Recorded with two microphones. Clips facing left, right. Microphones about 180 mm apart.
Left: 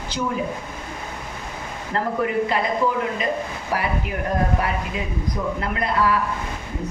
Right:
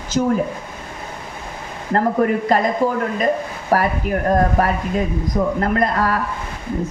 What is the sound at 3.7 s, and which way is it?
A man's voice, 45° right (ahead or behind).